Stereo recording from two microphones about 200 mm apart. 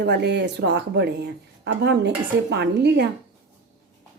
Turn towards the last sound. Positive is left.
turn(degrees=-60)  # may be behind; listen again after turning